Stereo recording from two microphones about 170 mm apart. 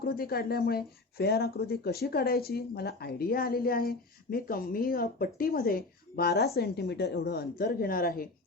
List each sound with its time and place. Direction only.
0.0 s speech: 65° left (ahead or behind)